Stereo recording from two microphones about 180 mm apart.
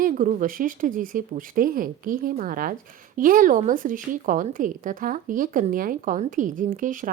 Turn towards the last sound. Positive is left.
turn(degrees=-50)  # may be behind; listen again after turning